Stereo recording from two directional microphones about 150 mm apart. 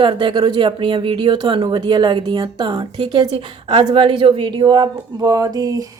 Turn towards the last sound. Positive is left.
turn(degrees=-25)  # may be behind; listen again after turning